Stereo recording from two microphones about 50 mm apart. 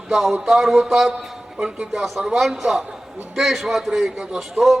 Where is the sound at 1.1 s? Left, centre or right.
Centre.